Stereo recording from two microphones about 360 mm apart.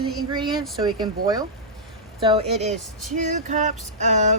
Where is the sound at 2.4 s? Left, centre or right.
Centre.